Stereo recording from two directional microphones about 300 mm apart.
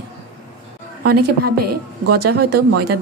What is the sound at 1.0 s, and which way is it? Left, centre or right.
Speech, right.